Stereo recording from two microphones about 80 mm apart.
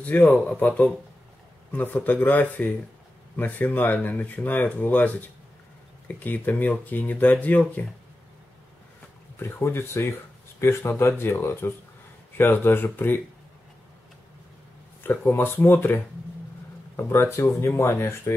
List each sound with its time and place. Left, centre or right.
0.0 s speech: centre
9.4 s speech: left
15.0 s speech: left